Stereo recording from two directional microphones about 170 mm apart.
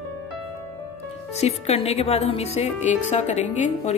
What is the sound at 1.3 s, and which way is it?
Speech, 40° left (ahead or behind).